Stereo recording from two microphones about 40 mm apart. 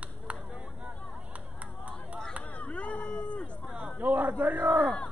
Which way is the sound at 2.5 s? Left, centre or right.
Left.